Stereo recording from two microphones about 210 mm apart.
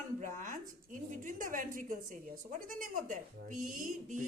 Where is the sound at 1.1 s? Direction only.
40° right (ahead or behind).